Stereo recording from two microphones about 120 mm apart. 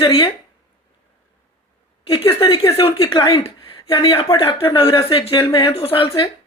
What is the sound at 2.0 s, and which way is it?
Speech, 50° left (ahead or behind).